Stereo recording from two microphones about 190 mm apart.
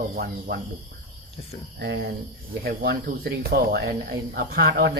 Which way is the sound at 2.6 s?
55° right (ahead or behind).